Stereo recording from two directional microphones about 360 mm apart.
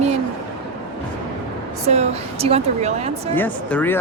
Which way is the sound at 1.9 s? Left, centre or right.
Centre.